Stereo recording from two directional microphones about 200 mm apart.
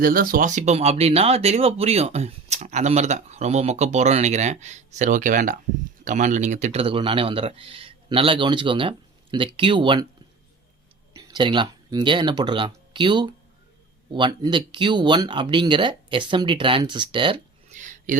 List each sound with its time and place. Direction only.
0.0 s a man's voice: 45° right (ahead or behind); by 10.1 s 25° right (ahead or behind)
11.1 s a man's voice: 20° right (ahead or behind)
17.7 s a sound: 40° right (ahead or behind)